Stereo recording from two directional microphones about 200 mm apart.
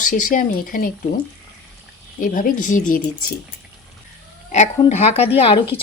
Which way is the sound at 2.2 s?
40° left (ahead or behind).